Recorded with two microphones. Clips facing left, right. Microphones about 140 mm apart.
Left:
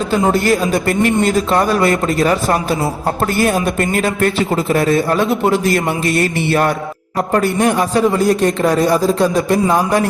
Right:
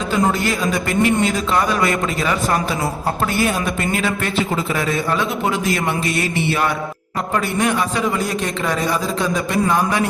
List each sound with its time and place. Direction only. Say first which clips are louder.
0.4 s a man's voice: left 6 dB; 45° left (ahead or behind)
7.3 s a man's voice: left 5 dB; 40° left (ahead or behind)